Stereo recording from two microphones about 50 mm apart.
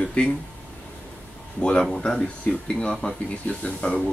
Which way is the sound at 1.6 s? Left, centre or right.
Centre.